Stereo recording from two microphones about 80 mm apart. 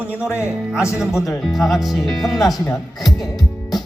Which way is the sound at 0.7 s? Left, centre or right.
Left.